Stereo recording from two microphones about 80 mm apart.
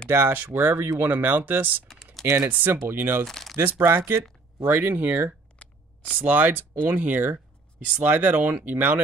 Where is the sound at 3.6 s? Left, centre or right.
Right.